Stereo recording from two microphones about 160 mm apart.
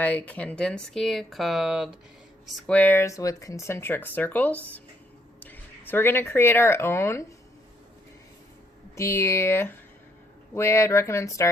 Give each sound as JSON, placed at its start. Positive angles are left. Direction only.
{"t": 0.0, "sound": "speech", "side_deg": 10}
{"t": 2.6, "sound": "speech", "side_deg": 10}
{"t": 9.0, "sound": "speech", "side_deg": 15}